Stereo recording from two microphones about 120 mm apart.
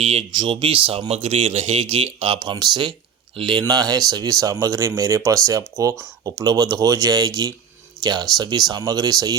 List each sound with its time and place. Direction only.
0.0 s speech: 60° right (ahead or behind)
0.3 s speech: 45° right (ahead or behind)